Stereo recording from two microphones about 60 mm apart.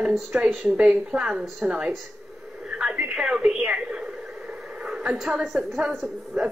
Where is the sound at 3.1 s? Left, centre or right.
Centre.